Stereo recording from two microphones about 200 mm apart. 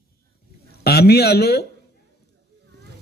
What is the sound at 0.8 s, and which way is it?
Speech, 50° left (ahead or behind).